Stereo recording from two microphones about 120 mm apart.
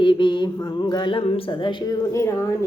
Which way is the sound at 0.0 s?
40° left (ahead or behind).